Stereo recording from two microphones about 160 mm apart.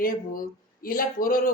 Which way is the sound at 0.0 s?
60° left (ahead or behind).